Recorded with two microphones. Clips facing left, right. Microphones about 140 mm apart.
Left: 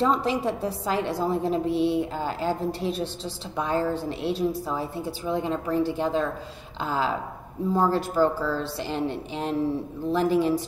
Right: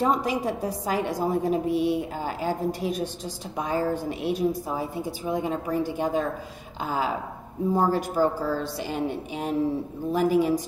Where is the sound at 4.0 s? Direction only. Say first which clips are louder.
Right 1 dB; 15° right (ahead or behind).